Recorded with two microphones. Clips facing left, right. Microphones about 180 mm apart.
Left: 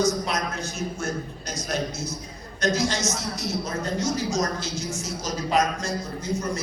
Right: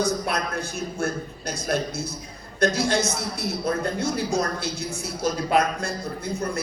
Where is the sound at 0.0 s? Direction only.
55° right (ahead or behind).